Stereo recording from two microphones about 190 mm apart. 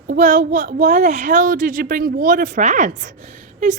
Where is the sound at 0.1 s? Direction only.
45° right (ahead or behind).